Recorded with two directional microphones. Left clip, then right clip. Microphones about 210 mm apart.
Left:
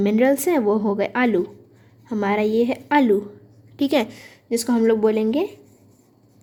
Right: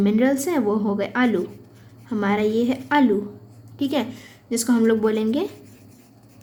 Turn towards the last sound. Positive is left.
turn(degrees=30)  # may be behind; listen again after turning